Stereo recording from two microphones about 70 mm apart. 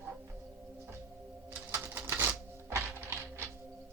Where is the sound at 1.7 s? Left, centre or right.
Right.